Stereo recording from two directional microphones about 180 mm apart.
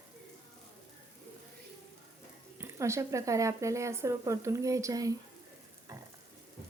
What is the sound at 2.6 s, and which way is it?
Speech, 15° right (ahead or behind).